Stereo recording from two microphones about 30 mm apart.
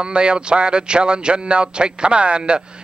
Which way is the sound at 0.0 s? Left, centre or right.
Right.